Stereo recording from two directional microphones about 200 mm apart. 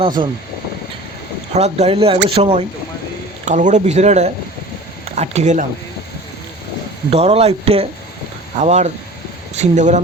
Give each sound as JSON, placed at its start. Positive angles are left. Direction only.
{"t": 0.2, "sound": "speech", "side_deg": -25}
{"t": 1.5, "sound": "speech", "side_deg": -35}
{"t": 7.1, "sound": "speech", "side_deg": -30}